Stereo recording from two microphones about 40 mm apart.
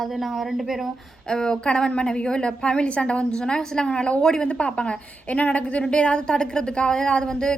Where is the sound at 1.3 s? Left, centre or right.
Centre.